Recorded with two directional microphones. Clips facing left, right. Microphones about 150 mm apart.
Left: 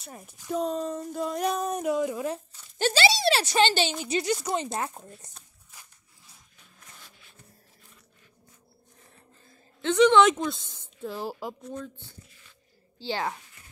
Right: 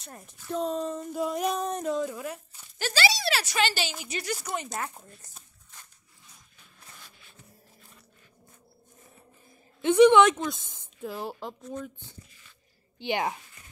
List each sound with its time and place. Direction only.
0.0 s speech: 5° left (ahead or behind); by 4.8 s 25° left (ahead or behind)
5.7 s a sound: 10° left (ahead or behind)
9.5 s a woman's voice: 15° right (ahead or behind)
10.7 s a sound: 20° right (ahead or behind)
11.1 s speech: centre (ahead or behind)
11.8 s speech: 20° right (ahead or behind)